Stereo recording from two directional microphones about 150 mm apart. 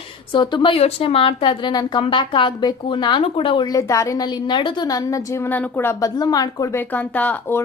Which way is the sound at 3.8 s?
20° left (ahead or behind).